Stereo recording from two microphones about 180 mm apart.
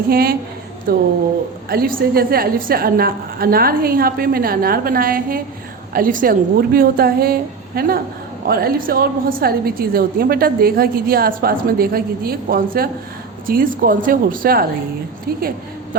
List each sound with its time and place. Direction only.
0.1 s a woman's voice: 55° right (ahead or behind)